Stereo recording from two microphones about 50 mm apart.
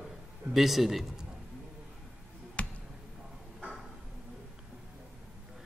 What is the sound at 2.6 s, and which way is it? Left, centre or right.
Basketball bounce, left.